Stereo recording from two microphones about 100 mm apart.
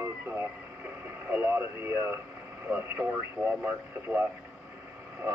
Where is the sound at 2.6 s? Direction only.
20° right (ahead or behind).